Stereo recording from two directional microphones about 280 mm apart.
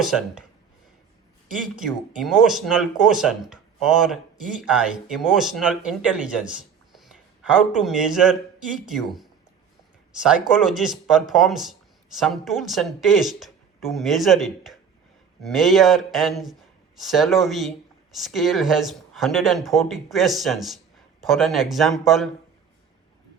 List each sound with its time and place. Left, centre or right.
0.0 s a man's voice: centre
1.6 s a man's voice: centre